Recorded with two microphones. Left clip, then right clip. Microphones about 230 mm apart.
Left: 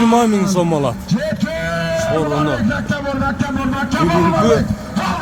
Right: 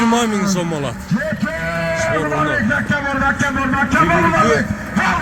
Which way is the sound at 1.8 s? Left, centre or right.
Left.